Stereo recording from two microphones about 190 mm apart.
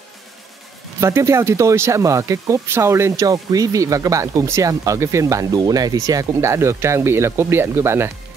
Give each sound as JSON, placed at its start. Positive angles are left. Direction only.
{"t": 1.0, "sound": "speech", "side_deg": -15}